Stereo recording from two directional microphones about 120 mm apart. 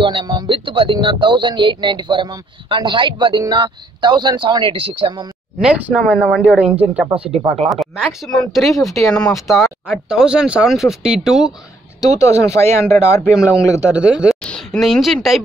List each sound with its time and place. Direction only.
0.0 s speech: 40° right (ahead or behind)
5.6 s speech: 5° right (ahead or behind)
12.0 s speech: 25° left (ahead or behind)
13.8 s speech: 10° right (ahead or behind)
14.4 s a woman's voice: 5° left (ahead or behind)